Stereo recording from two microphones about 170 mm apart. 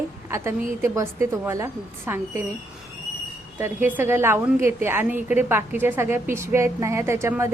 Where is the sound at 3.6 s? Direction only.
10° right (ahead or behind).